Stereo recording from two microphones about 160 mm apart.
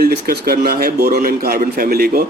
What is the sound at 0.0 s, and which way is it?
A man's voice, 70° right (ahead or behind).